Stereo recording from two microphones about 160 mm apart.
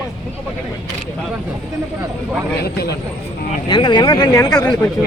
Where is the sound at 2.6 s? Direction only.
85° left.